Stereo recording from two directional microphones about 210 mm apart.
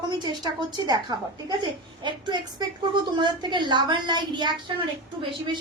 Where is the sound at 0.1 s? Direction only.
20° right (ahead or behind).